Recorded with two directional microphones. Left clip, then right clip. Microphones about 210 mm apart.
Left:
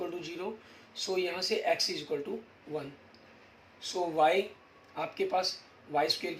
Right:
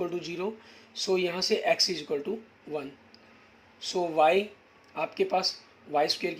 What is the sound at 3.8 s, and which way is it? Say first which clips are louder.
Speech: right 3 dB; 55° right (ahead or behind).